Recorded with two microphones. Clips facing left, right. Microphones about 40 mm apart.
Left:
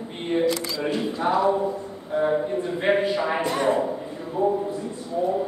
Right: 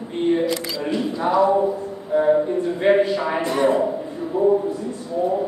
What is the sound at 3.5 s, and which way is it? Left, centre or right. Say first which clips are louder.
Speech: right 6 dB; centre.